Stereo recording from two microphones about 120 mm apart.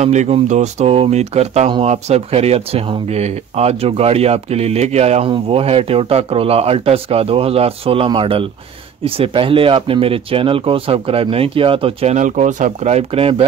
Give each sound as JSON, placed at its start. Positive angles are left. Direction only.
{"t": 0.0, "sound": "speech", "side_deg": -70}
{"t": 5.3, "sound": "speech", "side_deg": -50}